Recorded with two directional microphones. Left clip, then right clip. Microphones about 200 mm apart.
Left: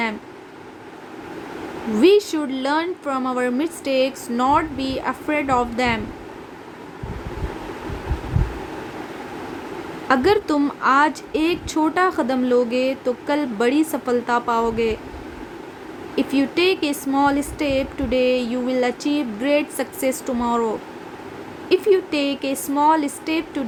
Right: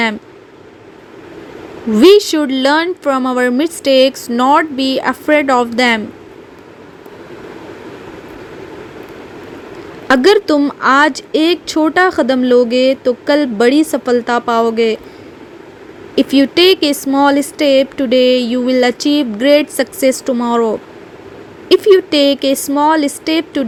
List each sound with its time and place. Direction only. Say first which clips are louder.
2.0 s speech: right 8 dB; 35° right (ahead or behind)
10.1 s a woman's voice: right 8 dB; 30° right (ahead or behind)
16.1 s speech: right 9 dB; 35° right (ahead or behind)